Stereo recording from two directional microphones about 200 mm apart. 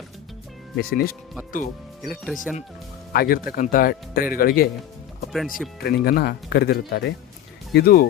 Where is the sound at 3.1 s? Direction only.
45° left (ahead or behind).